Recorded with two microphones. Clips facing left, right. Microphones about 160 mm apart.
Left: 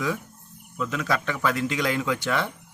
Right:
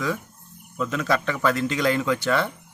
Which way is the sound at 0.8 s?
10° left (ahead or behind).